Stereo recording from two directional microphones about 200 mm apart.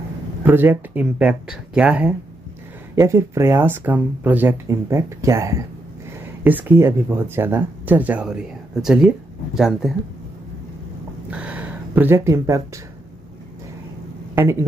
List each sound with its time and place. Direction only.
0.5 s speech: 10° right (ahead or behind)
11.2 s dog: 5° right (ahead or behind)
14.3 s speech: 10° right (ahead or behind)